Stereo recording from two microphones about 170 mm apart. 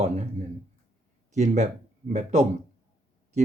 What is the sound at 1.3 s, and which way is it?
Speech, 45° right (ahead or behind).